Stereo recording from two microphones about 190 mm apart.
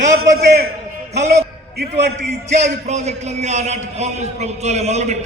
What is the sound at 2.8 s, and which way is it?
A man's voice, 35° right (ahead or behind).